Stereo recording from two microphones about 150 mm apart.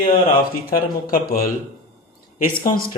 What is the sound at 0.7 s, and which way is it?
Speech, 75° left (ahead or behind).